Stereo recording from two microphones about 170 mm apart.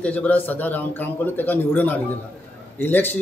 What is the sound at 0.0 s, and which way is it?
A man's voice, 10° left (ahead or behind).